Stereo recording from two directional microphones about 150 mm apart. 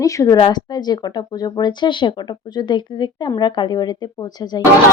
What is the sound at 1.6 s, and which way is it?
Speech, 30° left (ahead or behind).